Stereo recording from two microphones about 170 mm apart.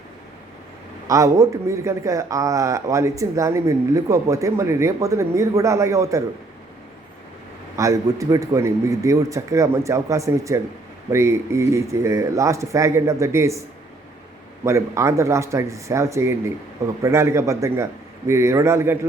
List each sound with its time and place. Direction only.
1.0 s a man's voice: 20° right (ahead or behind)
7.8 s a man's voice: 20° right (ahead or behind)
14.6 s speech: 15° right (ahead or behind)